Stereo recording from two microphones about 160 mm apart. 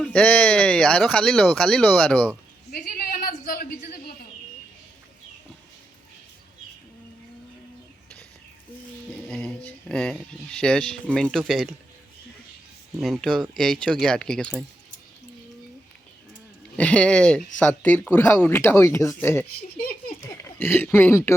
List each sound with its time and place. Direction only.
0.0 s speech: 5° left (ahead or behind)
2.7 s a sound: 65° left (ahead or behind)
9.2 s a sound: 5° left (ahead or behind)
11.1 s speech: 5° left (ahead or behind)
13.0 s speech: centre (ahead or behind)
16.7 s speech: 5° left (ahead or behind)